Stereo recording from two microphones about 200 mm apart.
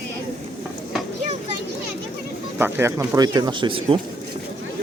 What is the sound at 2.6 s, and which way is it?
Speech, 10° right (ahead or behind).